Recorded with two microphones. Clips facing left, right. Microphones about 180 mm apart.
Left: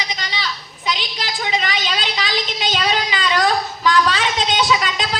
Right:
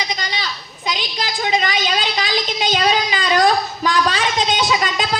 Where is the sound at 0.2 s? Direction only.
45° right (ahead or behind).